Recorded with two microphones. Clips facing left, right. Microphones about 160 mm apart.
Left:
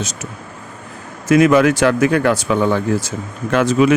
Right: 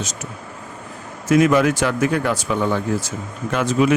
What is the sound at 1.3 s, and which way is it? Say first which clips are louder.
Speech: left 3 dB; 90° left.